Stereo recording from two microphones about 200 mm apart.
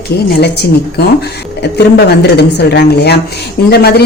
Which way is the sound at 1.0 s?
55° left (ahead or behind).